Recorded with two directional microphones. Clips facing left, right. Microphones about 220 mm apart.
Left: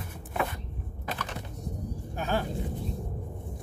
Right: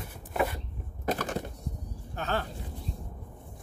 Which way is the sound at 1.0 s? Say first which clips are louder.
Right 7 dB; 45° right (ahead or behind).